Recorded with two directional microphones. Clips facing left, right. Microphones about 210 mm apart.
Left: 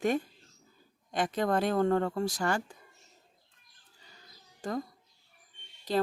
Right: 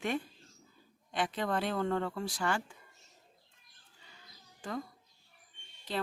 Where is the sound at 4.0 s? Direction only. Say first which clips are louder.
Left 1 dB; 40° left (ahead or behind).